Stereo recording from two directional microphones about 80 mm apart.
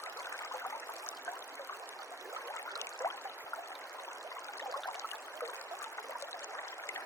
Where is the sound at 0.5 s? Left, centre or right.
Left.